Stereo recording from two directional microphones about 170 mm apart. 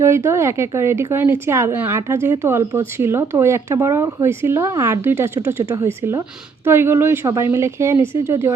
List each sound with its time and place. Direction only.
0.0 s speech: 15° right (ahead or behind)